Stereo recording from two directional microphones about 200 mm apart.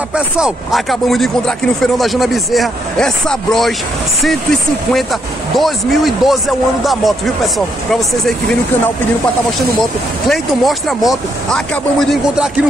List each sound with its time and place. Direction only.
0.1 s speech: 5° right (ahead or behind)
10.2 s speech: centre (ahead or behind)